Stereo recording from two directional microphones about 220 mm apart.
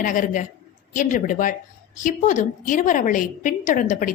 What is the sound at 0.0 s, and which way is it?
A woman's voice, 35° left (ahead or behind).